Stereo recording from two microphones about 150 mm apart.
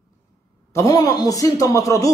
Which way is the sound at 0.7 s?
25° left (ahead or behind).